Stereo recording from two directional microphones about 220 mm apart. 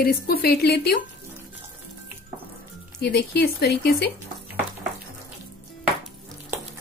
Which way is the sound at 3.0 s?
45° left (ahead or behind).